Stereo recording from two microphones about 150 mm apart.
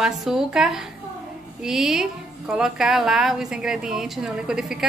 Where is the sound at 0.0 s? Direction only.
Centre (ahead or behind).